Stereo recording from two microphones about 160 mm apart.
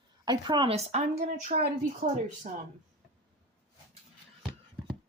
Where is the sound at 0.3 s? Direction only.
30° right (ahead or behind).